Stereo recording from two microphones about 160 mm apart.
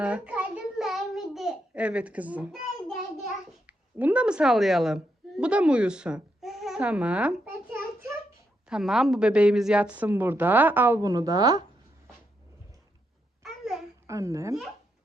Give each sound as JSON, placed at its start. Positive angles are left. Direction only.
{"t": 0.0, "sound": "a sound", "side_deg": -10}
{"t": 2.5, "sound": "child singing", "side_deg": 0}
{"t": 3.7, "sound": "a woman's voice", "side_deg": -10}
{"t": 13.4, "sound": "babbling", "side_deg": 0}
{"t": 14.1, "sound": "speech", "side_deg": -20}